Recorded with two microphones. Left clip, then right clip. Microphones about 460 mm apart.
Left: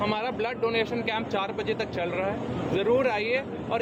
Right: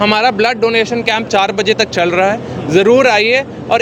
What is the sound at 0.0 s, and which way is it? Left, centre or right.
Speech, right.